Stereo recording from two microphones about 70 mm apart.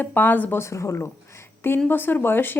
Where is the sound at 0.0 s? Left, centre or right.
Left.